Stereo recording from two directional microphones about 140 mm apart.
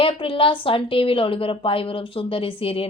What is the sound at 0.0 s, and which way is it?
A woman's voice, 40° left (ahead or behind).